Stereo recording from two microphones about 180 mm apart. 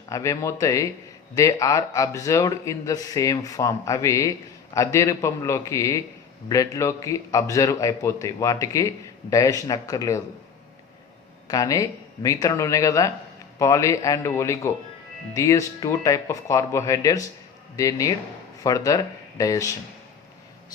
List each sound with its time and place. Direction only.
0.1 s a man's voice: 15° left (ahead or behind)
11.4 s a man's voice: 20° left (ahead or behind)